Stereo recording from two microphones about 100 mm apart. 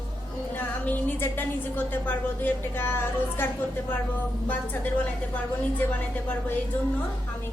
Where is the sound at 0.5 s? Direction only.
20° left (ahead or behind).